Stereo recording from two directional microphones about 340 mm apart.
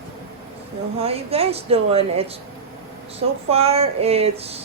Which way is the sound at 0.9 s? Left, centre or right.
Centre.